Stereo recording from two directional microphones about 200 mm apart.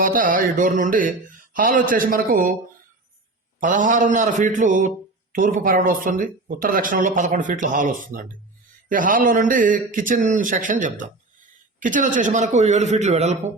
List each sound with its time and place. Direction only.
0.0 s speech: 45° right (ahead or behind)
3.6 s speech: 40° right (ahead or behind)